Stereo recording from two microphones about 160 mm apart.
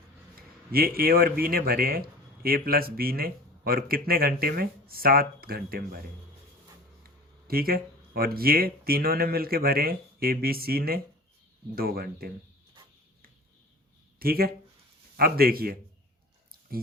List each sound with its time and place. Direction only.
0.7 s a man's voice: 70° right (ahead or behind)
7.4 s a man's voice: 70° right (ahead or behind)
14.2 s a man's voice: 70° right (ahead or behind)